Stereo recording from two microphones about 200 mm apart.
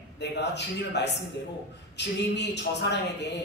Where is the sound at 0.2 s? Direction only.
60° left (ahead or behind).